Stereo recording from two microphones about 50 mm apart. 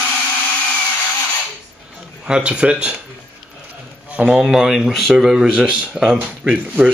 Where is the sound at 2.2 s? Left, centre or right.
Centre.